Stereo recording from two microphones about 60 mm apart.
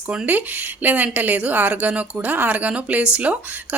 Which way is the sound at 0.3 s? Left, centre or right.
Right.